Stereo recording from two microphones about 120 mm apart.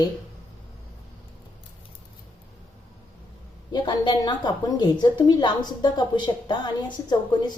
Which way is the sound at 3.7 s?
40° left (ahead or behind).